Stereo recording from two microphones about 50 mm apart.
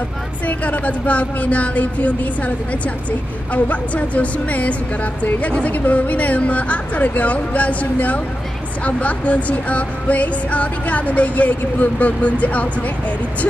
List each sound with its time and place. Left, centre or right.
0.5 s speech: left